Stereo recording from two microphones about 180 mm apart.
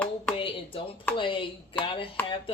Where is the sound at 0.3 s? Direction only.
30° left (ahead or behind).